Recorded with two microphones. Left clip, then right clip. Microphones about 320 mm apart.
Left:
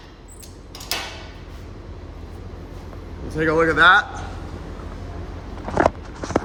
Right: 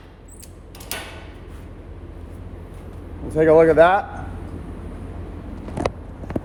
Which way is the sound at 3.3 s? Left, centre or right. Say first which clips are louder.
Right 5 dB; centre.